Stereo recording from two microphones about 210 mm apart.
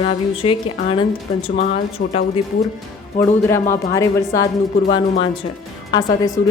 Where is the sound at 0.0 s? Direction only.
25° left (ahead or behind).